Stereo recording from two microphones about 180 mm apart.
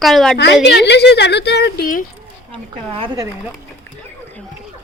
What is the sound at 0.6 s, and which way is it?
A woman's voice, 70° left (ahead or behind).